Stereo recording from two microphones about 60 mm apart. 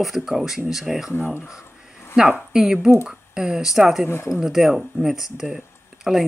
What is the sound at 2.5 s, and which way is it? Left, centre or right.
Speech, centre.